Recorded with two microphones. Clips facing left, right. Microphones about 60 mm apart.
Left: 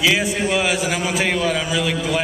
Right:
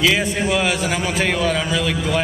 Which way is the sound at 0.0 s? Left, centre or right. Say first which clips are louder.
Even; centre.